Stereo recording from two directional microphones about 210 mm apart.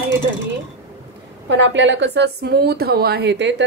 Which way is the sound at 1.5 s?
55° right (ahead or behind).